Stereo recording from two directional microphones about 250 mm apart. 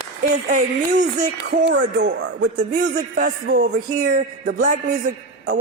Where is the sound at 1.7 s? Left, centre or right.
Right.